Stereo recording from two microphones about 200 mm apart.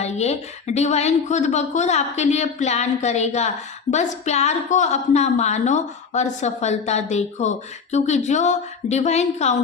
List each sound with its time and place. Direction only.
0.0 s a woman's voice: 35° left (ahead or behind)